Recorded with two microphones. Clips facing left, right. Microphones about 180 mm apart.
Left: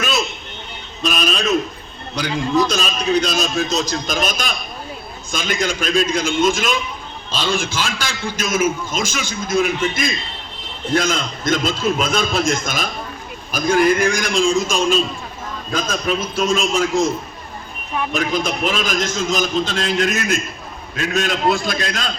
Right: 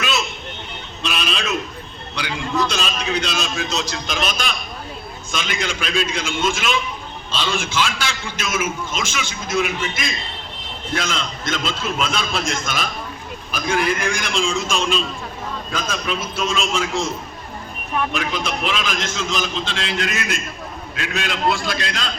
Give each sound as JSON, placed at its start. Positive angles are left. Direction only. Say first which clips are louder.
{"t": 1.0, "sound": "a sound", "louder": "left 5 dB", "side_deg": 40}
{"t": 2.2, "sound": "a man's voice", "louder": "left 5 dB", "side_deg": 40}
{"t": 18.1, "sound": "a man's voice", "louder": "left 4 dB", "side_deg": 40}